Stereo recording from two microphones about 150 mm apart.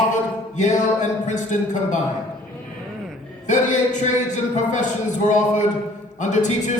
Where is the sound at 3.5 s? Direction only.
55° left (ahead or behind).